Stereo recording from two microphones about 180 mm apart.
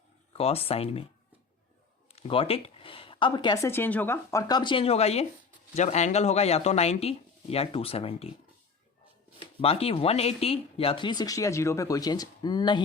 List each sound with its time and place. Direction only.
0.3 s speech: 35° left (ahead or behind)
2.1 s speech: 30° left (ahead or behind)
9.6 s speech: 30° left (ahead or behind)